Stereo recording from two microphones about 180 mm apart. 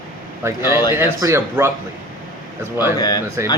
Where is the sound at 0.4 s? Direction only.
15° right (ahead or behind).